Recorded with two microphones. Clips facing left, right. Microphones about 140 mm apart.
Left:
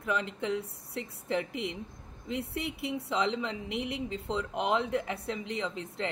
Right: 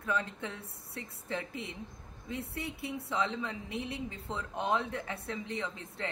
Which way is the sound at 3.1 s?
20° left (ahead or behind).